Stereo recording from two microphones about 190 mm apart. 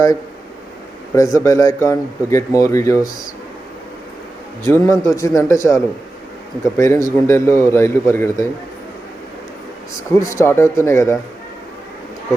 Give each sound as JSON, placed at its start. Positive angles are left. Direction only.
{"t": 1.1, "sound": "speech", "side_deg": 15}
{"t": 4.6, "sound": "speech", "side_deg": 15}
{"t": 10.1, "sound": "speech", "side_deg": 15}